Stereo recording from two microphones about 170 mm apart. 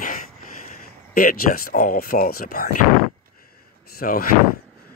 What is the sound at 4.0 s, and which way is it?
Speech, 60° left (ahead or behind).